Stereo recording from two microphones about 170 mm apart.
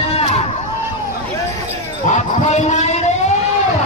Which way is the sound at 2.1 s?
40° left (ahead or behind).